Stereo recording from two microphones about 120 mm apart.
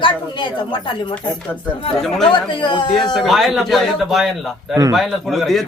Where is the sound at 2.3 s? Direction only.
40° left (ahead or behind).